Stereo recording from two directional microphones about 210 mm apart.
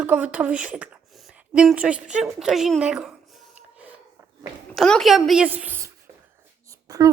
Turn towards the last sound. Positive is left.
turn(degrees=-15)  # may be behind; listen again after turning